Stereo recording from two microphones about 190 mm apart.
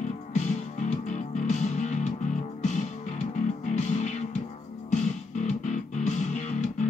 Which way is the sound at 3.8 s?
35° left (ahead or behind).